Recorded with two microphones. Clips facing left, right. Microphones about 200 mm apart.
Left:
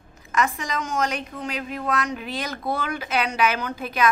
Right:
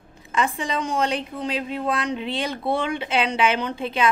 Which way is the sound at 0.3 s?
30° right (ahead or behind).